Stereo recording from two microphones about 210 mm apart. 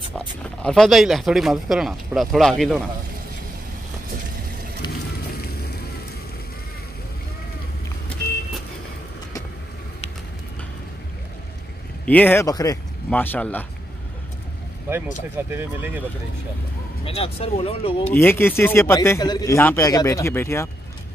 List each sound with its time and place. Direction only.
0.2 s speech: 5° left (ahead or behind)
5.4 s vehicle: 45° left (ahead or behind)
12.1 s a man's voice: 10° left (ahead or behind)
14.9 s speech: 10° right (ahead or behind)
17.0 s speech: 30° left (ahead or behind)
18.1 s a man's voice: 10° left (ahead or behind)